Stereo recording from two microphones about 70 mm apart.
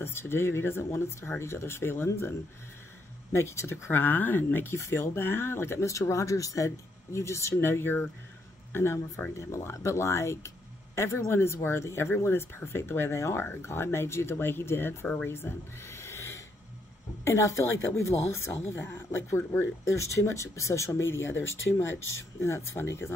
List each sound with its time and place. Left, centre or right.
0.0 s speech: left
3.3 s speech: left
4.7 s speech: left
15.2 s owl: left
17.2 s speech: left